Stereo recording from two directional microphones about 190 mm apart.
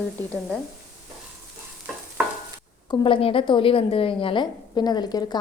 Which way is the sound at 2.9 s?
25° left (ahead or behind).